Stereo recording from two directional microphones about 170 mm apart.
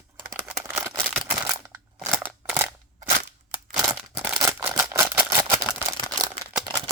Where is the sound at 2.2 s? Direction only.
10° right (ahead or behind).